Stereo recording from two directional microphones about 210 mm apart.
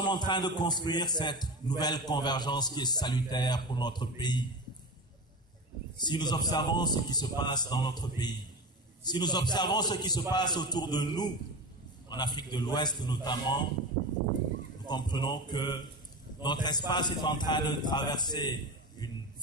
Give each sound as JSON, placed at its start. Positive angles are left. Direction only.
{"t": 0.0, "sound": "a man's voice", "side_deg": 20}
{"t": 5.9, "sound": "a man's voice", "side_deg": 20}
{"t": 14.9, "sound": "a man's voice", "side_deg": 20}